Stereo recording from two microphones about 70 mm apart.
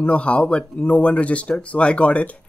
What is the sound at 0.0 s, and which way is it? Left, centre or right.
Speech, centre.